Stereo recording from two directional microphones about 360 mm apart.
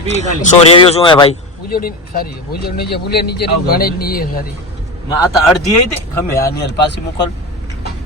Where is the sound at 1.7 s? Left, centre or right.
Left.